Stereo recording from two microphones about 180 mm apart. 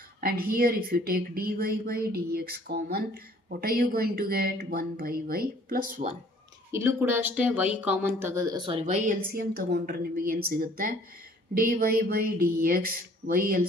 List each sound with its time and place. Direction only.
0.2 s speech: 55° right (ahead or behind)
6.7 s speech: 15° right (ahead or behind)
8.8 s speech: 45° right (ahead or behind)